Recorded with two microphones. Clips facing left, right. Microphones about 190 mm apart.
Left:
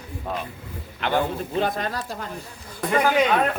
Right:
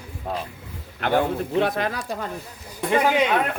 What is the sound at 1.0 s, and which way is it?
Speech, 60° right (ahead or behind).